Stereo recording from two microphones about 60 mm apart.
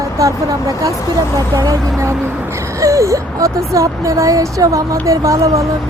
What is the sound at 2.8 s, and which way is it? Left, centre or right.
Speech, right.